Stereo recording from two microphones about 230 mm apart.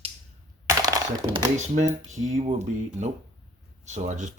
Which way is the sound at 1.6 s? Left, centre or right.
Right.